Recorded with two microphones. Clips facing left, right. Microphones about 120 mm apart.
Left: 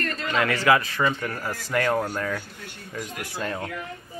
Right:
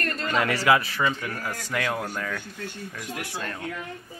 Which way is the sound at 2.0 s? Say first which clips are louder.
Left 3 dB; 10° left (ahead or behind).